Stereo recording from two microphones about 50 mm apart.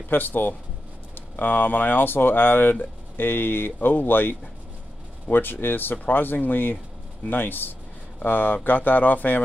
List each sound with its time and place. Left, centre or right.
0.1 s speech: left